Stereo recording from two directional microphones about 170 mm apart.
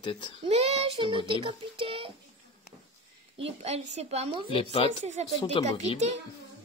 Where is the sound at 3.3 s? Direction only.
40° right (ahead or behind).